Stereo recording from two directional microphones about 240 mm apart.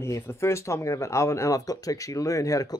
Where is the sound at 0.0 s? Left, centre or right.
Centre.